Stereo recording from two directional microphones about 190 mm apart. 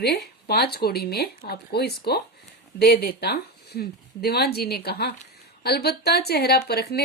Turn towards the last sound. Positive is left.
turn(degrees=55)  # may be behind; listen again after turning